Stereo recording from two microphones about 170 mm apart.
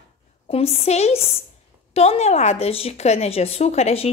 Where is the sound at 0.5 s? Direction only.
35° left (ahead or behind).